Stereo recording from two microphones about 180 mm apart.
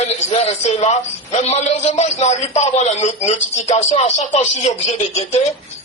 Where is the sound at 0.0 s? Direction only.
35° left (ahead or behind).